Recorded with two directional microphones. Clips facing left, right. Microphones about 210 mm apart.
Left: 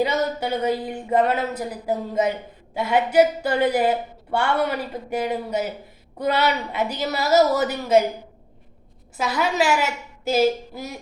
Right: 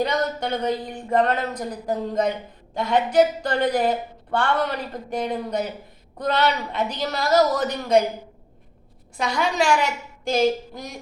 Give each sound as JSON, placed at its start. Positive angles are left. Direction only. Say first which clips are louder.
{"t": 0.0, "sound": "a woman's voice", "louder": "left 1 dB", "side_deg": 5}
{"t": 9.1, "sound": "a woman's voice", "louder": "left 1 dB", "side_deg": 5}